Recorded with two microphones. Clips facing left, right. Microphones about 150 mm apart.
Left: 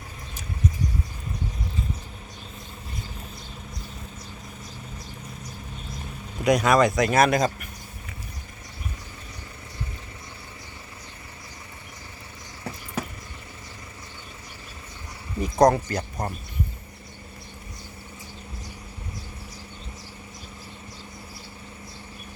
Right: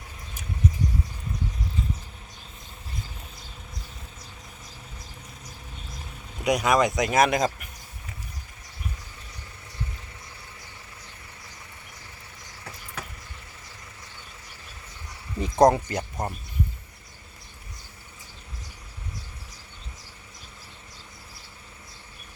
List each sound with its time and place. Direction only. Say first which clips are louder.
6.4 s speech: left 3 dB; 10° right (ahead or behind)
15.4 s a sound: even; 25° right (ahead or behind)
15.7 s speech: left 1 dB; 20° right (ahead or behind)